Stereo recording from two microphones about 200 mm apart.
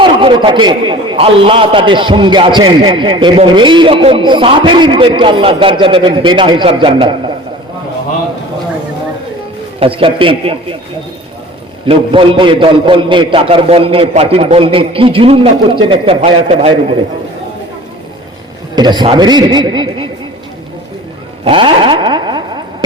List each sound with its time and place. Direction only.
0.0 s a man's voice: 25° right (ahead or behind)
9.8 s a man's voice: 25° right (ahead or behind)
11.9 s a man's voice: 25° right (ahead or behind)
18.8 s a man's voice: 20° right (ahead or behind)
21.4 s a sound: 25° right (ahead or behind)